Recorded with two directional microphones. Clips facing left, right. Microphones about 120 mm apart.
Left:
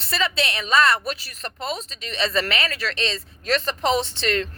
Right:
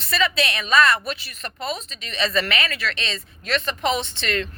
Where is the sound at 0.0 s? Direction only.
30° left (ahead or behind).